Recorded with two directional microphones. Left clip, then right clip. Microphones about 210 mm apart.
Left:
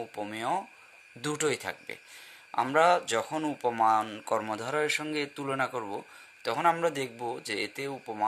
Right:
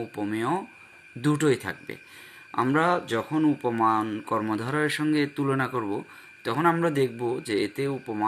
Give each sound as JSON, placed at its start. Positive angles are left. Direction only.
{"t": 0.1, "sound": "speech", "side_deg": 40}